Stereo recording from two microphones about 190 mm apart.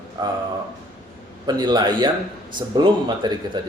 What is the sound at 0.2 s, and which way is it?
Speech, 20° right (ahead or behind).